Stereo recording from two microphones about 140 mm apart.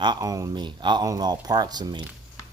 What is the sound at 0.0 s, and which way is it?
Speech, 30° right (ahead or behind).